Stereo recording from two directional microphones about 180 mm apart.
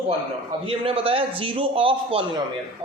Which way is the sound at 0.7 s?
30° right (ahead or behind).